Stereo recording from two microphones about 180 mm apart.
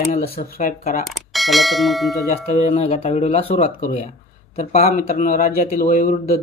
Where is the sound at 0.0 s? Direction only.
55° left (ahead or behind).